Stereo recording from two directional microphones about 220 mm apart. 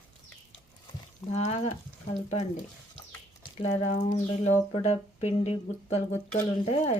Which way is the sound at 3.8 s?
30° left (ahead or behind).